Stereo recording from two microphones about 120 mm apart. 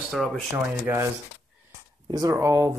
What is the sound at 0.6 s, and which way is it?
Speech, 25° right (ahead or behind).